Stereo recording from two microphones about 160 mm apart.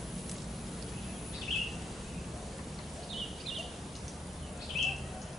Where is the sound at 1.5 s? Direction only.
Centre (ahead or behind).